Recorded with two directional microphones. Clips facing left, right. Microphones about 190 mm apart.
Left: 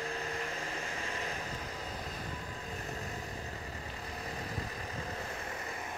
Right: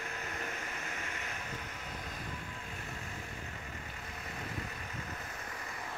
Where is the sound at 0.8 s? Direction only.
35° left (ahead or behind).